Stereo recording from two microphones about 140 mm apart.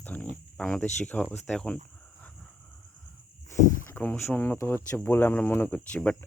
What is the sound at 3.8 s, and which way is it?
Speech, 15° left (ahead or behind).